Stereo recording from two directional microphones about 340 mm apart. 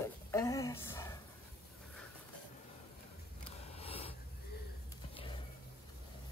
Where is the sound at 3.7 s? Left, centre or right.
Centre.